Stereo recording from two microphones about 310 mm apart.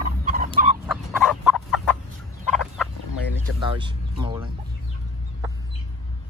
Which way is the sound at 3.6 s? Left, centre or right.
Centre.